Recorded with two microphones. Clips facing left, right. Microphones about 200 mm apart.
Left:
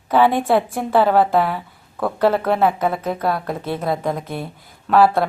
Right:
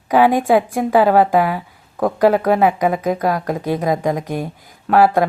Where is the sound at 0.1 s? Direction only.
15° right (ahead or behind).